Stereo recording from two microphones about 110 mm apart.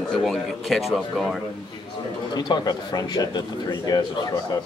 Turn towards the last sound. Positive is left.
turn(degrees=40)  # may be behind; listen again after turning